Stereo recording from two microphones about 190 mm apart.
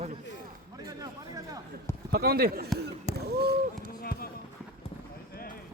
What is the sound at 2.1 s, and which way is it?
Speech, 55° right (ahead or behind).